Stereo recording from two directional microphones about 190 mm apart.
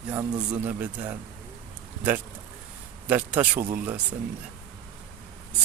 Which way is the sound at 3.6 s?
45° right (ahead or behind).